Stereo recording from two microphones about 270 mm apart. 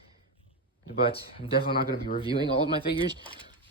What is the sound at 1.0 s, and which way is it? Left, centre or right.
Speech, centre.